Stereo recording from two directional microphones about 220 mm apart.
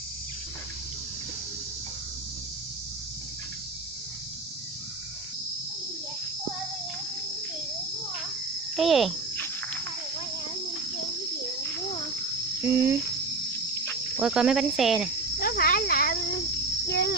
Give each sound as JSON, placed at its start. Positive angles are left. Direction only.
{"t": 8.7, "sound": "insect", "side_deg": 0}
{"t": 12.6, "sound": "speech", "side_deg": -10}
{"t": 14.1, "sound": "speech", "side_deg": -5}
{"t": 15.3, "sound": "cricket", "side_deg": 45}